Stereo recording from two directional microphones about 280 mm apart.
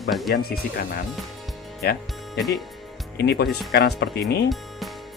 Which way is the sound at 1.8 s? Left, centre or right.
Left.